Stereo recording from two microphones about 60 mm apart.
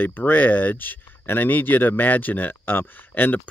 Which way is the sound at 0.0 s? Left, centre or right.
Left.